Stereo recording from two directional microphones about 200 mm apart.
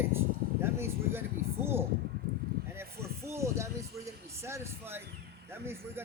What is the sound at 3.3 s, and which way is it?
Speech, 15° right (ahead or behind).